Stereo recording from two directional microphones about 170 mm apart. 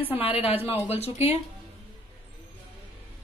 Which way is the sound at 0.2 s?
35° left (ahead or behind).